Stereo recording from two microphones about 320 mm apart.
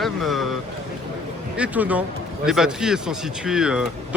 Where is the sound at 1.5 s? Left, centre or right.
Centre.